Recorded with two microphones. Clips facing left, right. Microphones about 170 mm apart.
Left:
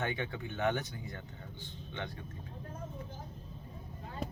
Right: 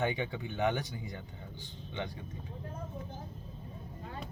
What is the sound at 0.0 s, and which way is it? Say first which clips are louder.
A man's voice: right 3 dB; 15° right (ahead or behind).